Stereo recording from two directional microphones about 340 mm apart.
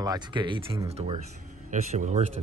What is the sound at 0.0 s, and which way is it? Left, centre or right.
Speech, centre.